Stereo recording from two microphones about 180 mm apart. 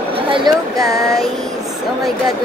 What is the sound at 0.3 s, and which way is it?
Speech, 20° right (ahead or behind).